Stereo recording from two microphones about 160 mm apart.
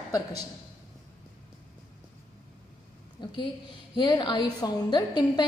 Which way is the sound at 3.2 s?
30° left (ahead or behind).